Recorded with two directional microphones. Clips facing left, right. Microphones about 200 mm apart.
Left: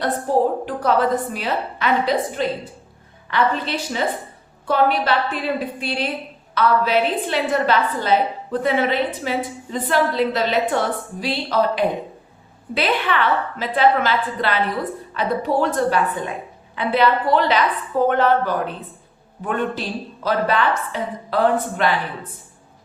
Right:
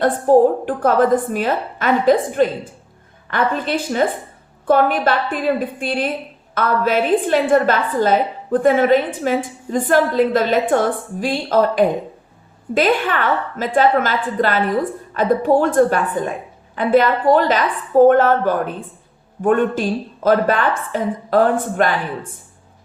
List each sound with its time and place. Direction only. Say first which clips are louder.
0.6 s a woman's voice: right 4 dB; 50° right (ahead or behind)